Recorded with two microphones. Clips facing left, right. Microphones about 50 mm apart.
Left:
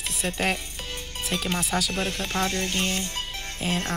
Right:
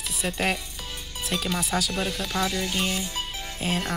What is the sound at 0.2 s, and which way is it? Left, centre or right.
Speech, centre.